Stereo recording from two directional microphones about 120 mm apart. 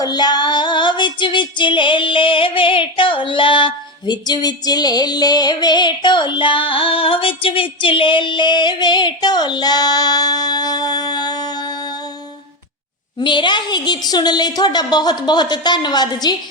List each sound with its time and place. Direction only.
0.0 s female singing: 35° left (ahead or behind)
13.1 s female singing: 40° left (ahead or behind)